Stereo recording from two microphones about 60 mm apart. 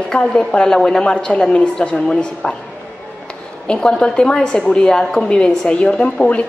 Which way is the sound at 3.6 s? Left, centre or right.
Centre.